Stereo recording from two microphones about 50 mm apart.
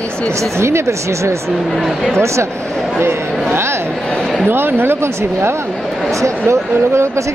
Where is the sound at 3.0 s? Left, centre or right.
Right.